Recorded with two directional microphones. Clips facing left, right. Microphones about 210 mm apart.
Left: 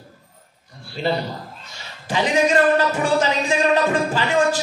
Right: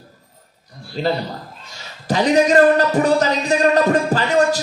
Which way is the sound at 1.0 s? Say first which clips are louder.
Right 2 dB; 40° right (ahead or behind).